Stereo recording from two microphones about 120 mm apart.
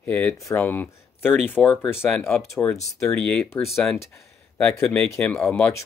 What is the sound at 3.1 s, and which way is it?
Speech, 10° left (ahead or behind).